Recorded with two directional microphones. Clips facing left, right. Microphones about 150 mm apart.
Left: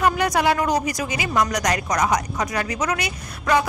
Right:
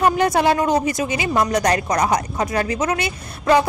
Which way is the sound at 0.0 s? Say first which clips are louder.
Right 3 dB; 30° right (ahead or behind).